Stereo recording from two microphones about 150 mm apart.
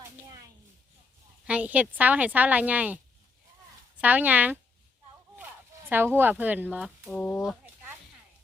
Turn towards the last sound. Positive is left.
turn(degrees=5)  # may be behind; listen again after turning